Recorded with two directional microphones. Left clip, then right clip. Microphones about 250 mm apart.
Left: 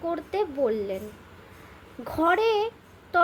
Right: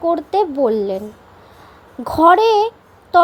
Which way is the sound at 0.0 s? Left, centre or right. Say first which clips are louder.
Right 12 dB; centre.